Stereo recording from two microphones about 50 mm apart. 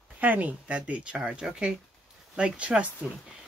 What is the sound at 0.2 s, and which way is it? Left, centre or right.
Speech, right.